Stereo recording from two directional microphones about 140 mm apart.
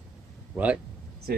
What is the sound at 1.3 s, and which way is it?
Speech, 90° right.